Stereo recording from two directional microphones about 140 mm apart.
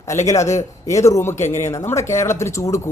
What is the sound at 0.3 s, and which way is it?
Speech, 20° left (ahead or behind).